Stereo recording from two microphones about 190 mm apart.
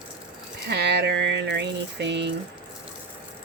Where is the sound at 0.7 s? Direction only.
60° right (ahead or behind).